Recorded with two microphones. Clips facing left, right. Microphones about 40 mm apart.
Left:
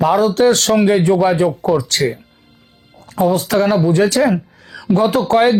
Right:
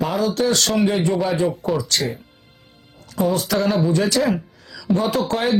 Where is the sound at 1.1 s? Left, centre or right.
Centre.